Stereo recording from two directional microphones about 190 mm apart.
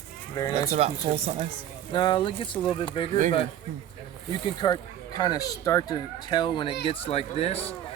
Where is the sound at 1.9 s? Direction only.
25° left (ahead or behind).